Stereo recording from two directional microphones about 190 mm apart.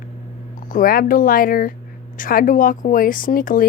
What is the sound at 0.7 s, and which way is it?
A woman's voice, 45° left (ahead or behind).